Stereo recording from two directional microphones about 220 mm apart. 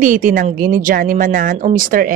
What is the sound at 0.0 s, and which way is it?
Speech, 35° right (ahead or behind).